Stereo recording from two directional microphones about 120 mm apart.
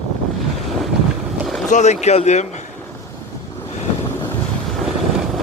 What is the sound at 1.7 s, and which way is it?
Speech, 85° left.